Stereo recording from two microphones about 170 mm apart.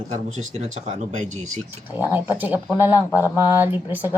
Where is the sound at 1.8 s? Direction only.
10° right (ahead or behind).